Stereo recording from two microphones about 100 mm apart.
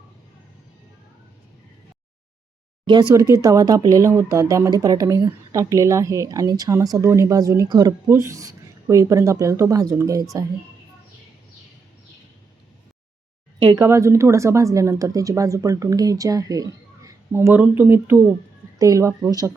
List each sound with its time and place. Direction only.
2.8 s speech: 50° right (ahead or behind)
3.2 s speech: 35° right (ahead or behind)
13.7 s speech: 30° right (ahead or behind)
17.5 s speech: 20° right (ahead or behind); by 19.5 s 40° right (ahead or behind)